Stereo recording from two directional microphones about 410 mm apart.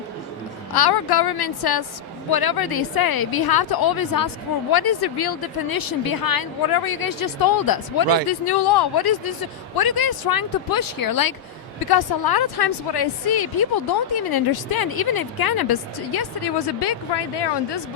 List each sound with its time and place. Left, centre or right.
0.7 s a woman's voice: left
8.3 s a woman's voice: left